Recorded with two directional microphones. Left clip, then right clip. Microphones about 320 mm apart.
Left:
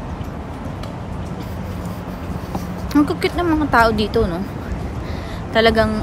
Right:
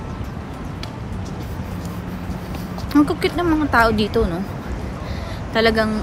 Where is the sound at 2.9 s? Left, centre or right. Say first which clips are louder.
Even; centre.